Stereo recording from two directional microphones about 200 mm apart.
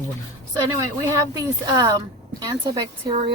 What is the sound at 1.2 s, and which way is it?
Speech, 20° right (ahead or behind).